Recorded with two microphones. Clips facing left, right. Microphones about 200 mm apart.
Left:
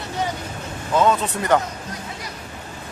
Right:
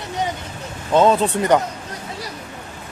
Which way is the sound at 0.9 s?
30° right (ahead or behind).